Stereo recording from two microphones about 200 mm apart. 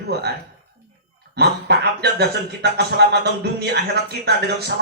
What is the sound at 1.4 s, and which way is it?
Speech, 55° right (ahead or behind).